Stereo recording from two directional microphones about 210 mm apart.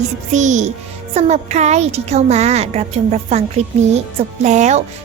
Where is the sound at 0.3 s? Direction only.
35° right (ahead or behind).